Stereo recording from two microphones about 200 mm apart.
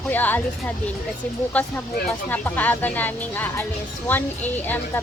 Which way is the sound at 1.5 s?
10° left (ahead or behind).